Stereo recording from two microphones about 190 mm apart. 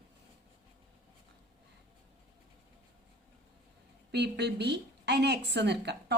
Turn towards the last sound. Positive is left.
turn(degrees=-65)  # may be behind; listen again after turning